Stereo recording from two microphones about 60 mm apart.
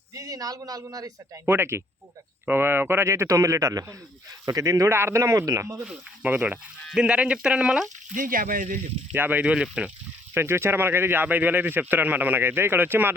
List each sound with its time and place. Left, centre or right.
0.1 s a man's voice: right
1.5 s speech: right
3.1 s a man's voice: right
4.4 s a man's voice: right
4.9 s speech: right
6.3 s speech: right
6.9 s speech: centre
9.1 s speech: right
9.4 s speech: centre
10.3 s speech: right